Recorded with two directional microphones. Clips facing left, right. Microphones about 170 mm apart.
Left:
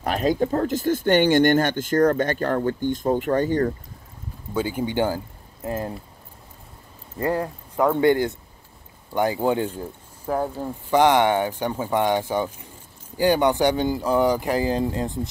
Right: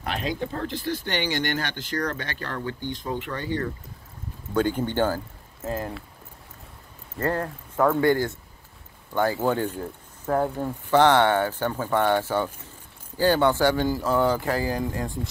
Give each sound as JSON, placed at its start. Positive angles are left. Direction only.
{"t": 0.0, "sound": "speech", "side_deg": 45}
{"t": 4.6, "sound": "speech", "side_deg": 10}
{"t": 7.2, "sound": "speech", "side_deg": 15}